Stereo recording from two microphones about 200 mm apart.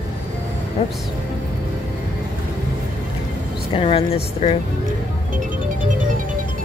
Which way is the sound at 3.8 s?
30° left (ahead or behind).